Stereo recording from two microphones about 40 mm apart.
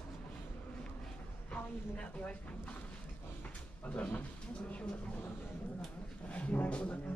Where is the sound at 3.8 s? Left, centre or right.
Left.